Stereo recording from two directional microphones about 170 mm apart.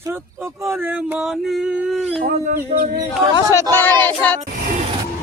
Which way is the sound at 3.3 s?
20° left (ahead or behind).